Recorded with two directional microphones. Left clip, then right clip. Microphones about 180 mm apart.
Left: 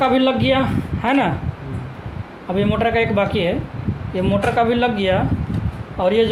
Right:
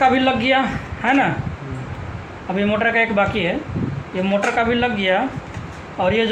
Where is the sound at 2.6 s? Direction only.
65° left (ahead or behind).